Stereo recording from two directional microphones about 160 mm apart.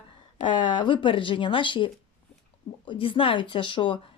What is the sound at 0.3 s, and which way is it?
Speech, 30° left (ahead or behind).